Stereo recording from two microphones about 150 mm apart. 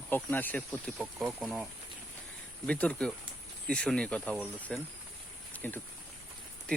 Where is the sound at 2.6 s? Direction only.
10° left (ahead or behind).